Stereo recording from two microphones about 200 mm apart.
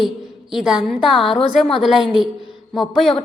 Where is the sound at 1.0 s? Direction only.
25° left (ahead or behind).